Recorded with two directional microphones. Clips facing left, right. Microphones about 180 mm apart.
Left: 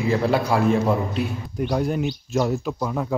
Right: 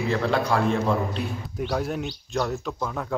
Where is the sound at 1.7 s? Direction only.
Centre (ahead or behind).